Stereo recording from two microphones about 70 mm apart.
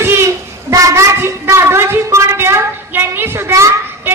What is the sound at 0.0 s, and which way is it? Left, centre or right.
Child singing, right.